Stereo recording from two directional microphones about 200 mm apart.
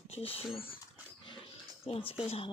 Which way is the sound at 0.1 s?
30° left (ahead or behind).